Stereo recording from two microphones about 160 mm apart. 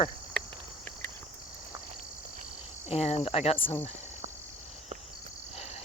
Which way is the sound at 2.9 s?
40° left (ahead or behind).